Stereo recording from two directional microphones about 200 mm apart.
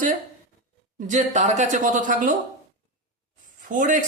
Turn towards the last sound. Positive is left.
turn(degrees=-40)  # may be behind; listen again after turning